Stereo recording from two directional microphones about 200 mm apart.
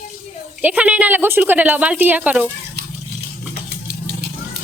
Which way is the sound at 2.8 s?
55° right (ahead or behind).